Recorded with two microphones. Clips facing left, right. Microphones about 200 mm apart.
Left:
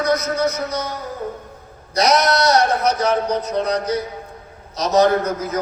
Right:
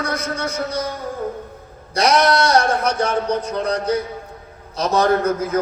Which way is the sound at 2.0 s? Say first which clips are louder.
Right 1 dB; 30° right (ahead or behind).